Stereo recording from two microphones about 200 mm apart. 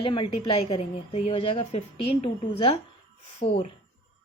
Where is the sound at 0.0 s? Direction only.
25° left (ahead or behind).